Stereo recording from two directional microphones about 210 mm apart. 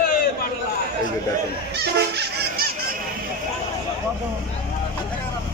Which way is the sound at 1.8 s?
50° right (ahead or behind).